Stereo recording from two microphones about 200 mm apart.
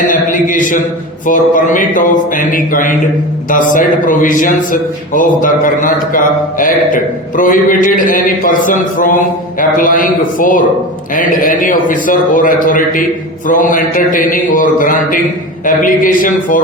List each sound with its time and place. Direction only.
0.1 s a man's voice: 40° left (ahead or behind)